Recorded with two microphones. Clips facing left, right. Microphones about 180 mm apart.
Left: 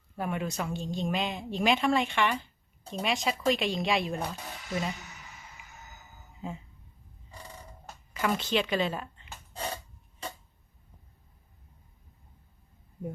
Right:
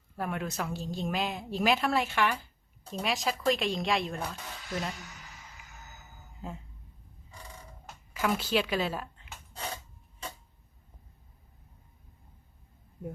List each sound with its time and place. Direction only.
0.2 s a woman's voice: centre (ahead or behind)
5.6 s music: centre (ahead or behind)
6.4 s a woman's voice: centre (ahead or behind)
8.1 s a woman's voice: 5° right (ahead or behind)